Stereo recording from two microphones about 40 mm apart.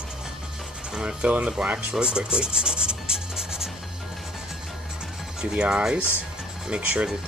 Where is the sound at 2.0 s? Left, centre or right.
Right.